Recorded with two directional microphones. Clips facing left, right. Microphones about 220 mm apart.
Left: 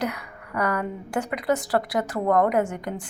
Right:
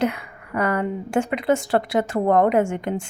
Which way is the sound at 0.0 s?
25° right (ahead or behind).